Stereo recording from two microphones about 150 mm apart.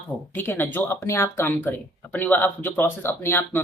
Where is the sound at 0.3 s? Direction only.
15° left (ahead or behind).